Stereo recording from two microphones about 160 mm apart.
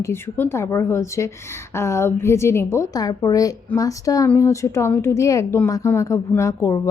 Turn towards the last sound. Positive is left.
turn(degrees=20)  # may be behind; listen again after turning